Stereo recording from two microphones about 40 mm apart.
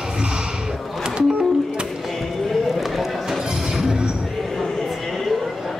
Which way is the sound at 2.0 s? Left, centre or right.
Centre.